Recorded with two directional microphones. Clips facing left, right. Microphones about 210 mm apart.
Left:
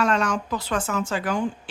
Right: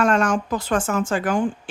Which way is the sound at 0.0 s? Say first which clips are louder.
Right 4 dB; 50° right (ahead or behind).